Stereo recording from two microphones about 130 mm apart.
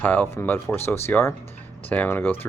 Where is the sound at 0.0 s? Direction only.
15° left (ahead or behind).